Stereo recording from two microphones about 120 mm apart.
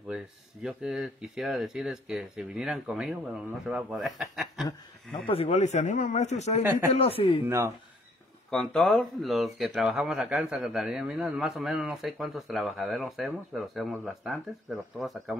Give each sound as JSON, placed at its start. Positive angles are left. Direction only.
{"t": 0.1, "sound": "speech", "side_deg": -5}
{"t": 5.2, "sound": "speech", "side_deg": 55}
{"t": 6.6, "sound": "speech", "side_deg": -15}
{"t": 6.9, "sound": "speech", "side_deg": 55}
{"t": 7.4, "sound": "speech", "side_deg": -25}
{"t": 8.5, "sound": "speech", "side_deg": 5}